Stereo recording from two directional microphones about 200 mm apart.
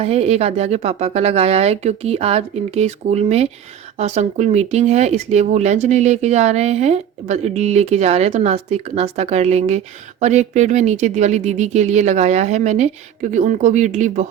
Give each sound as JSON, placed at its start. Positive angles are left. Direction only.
{"t": 0.0, "sound": "speech", "side_deg": -30}